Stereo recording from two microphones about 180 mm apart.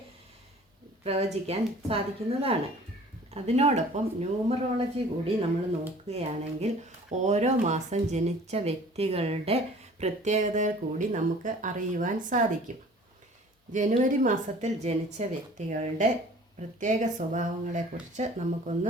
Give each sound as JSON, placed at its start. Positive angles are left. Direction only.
{"t": 1.0, "sound": "speech", "side_deg": -35}
{"t": 13.7, "sound": "speech", "side_deg": -45}